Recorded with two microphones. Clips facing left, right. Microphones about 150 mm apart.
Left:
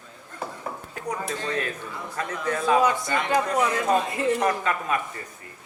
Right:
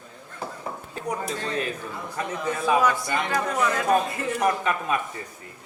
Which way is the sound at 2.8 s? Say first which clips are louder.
Even; 20° left (ahead or behind).